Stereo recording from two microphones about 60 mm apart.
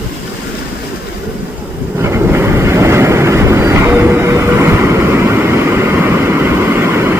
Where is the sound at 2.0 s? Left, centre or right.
Right.